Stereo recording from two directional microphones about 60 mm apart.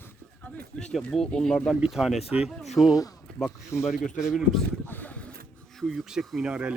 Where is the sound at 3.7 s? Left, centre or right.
Left.